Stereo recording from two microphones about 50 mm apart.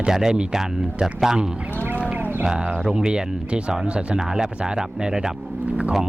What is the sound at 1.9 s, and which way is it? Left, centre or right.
Sheep, right.